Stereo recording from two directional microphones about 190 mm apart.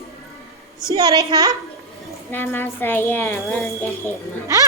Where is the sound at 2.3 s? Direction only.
10° left (ahead or behind).